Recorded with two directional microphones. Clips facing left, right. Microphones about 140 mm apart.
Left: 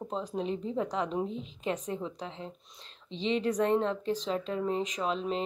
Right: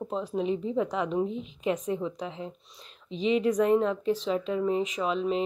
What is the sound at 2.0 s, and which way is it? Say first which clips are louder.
Speech: right 5 dB; 5° right (ahead or behind).